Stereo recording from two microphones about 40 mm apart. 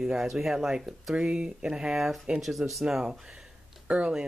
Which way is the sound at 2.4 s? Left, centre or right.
Centre.